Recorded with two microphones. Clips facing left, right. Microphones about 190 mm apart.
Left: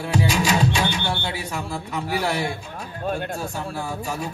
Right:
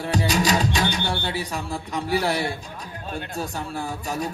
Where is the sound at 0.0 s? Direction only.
35° right (ahead or behind).